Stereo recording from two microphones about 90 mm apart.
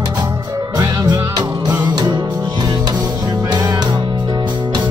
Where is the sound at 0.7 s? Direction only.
45° right (ahead or behind).